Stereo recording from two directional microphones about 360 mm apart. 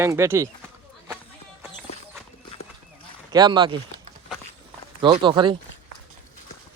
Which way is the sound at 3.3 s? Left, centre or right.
Centre.